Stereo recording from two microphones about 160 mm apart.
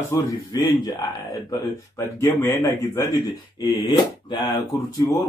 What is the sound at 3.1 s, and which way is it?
Speech, 30° left (ahead or behind).